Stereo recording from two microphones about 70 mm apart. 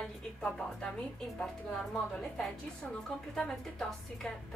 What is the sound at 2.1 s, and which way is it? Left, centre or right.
A woman's voice, centre.